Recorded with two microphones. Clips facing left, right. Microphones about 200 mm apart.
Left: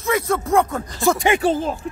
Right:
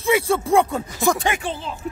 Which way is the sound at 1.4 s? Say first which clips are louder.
Left 9 dB; 45° left (ahead or behind).